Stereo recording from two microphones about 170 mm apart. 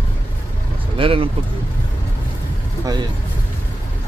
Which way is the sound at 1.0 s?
30° right (ahead or behind).